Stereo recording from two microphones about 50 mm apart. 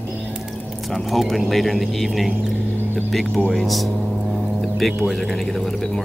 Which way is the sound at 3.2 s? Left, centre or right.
Centre.